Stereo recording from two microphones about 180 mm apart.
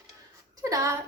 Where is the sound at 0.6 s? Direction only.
15° right (ahead or behind).